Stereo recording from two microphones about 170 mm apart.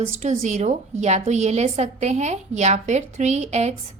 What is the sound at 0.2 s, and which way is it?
A woman's voice, 45° right (ahead or behind).